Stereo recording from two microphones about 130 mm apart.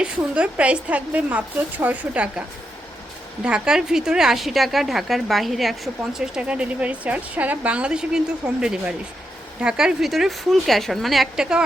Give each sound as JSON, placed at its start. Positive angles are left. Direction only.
{"t": 0.0, "sound": "a woman's voice", "side_deg": -10}
{"t": 3.4, "sound": "a woman's voice", "side_deg": -5}